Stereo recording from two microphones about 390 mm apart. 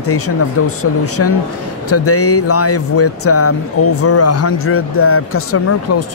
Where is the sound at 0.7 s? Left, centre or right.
Left.